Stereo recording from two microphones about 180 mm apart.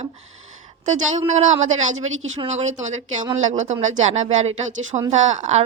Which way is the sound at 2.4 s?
40° right (ahead or behind).